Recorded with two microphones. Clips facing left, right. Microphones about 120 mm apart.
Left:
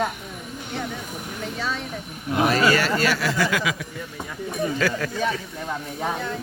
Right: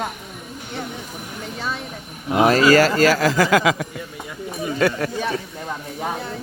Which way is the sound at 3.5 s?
90° right.